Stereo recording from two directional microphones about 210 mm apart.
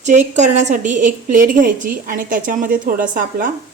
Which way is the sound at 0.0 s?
35° right (ahead or behind).